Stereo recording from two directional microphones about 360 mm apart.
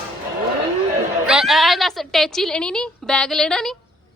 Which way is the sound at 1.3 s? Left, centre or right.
Centre.